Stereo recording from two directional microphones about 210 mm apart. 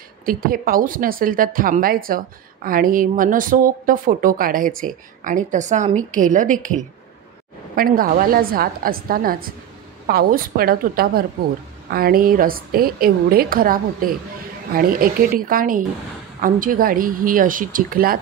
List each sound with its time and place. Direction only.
0.2 s a woman's voice: 45° right (ahead or behind)